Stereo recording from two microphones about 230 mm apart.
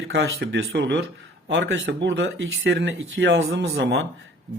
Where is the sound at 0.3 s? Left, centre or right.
Right.